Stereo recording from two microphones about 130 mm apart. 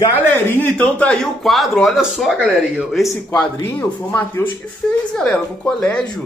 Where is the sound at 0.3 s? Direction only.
15° left (ahead or behind); by 3.0 s 10° right (ahead or behind).